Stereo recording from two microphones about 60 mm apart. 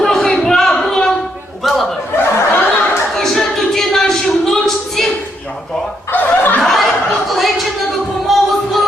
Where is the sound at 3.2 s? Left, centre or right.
Centre.